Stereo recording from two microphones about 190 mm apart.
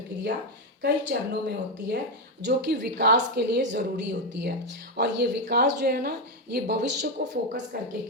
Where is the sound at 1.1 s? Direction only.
55° right (ahead or behind).